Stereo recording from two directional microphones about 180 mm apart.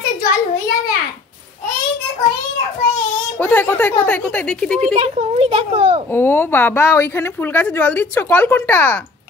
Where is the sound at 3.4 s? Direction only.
10° left (ahead or behind).